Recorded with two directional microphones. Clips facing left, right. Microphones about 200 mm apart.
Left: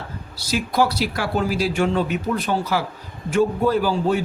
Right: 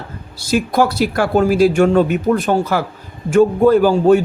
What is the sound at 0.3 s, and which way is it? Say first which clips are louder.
A man's voice: right 5 dB; 50° right (ahead or behind).